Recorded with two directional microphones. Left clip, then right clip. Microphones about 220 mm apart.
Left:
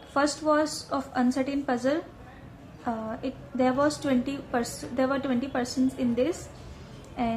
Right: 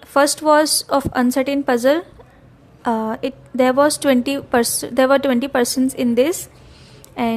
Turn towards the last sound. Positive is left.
turn(degrees=-50)  # may be behind; listen again after turning